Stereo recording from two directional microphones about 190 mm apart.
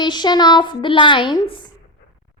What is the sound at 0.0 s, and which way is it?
A woman's voice, 25° left (ahead or behind).